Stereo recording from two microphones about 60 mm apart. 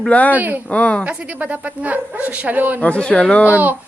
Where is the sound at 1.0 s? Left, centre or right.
Right.